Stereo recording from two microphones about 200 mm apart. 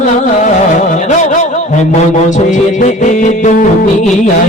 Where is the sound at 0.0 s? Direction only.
40° left (ahead or behind).